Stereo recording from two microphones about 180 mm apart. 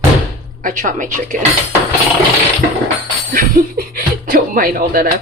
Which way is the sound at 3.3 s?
50° right (ahead or behind).